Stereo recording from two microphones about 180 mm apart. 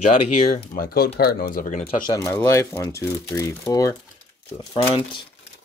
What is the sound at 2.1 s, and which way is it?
Speech, 10° left (ahead or behind).